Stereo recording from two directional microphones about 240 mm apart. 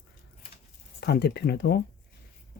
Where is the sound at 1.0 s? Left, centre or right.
Left.